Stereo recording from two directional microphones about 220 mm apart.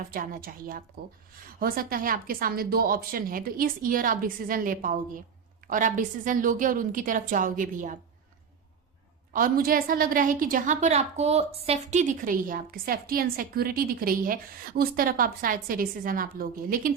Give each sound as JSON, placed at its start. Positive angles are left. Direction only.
{"t": 0.0, "sound": "a woman's voice", "side_deg": -40}
{"t": 9.3, "sound": "a woman's voice", "side_deg": -40}